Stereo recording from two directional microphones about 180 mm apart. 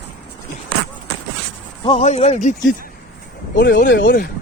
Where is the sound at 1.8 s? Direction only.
35° left (ahead or behind).